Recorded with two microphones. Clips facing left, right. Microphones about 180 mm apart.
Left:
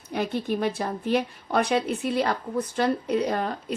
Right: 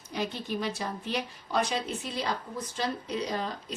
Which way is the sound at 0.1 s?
55° left (ahead or behind).